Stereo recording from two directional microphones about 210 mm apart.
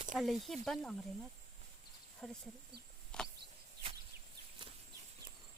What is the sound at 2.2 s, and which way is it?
Speech, 5° left (ahead or behind).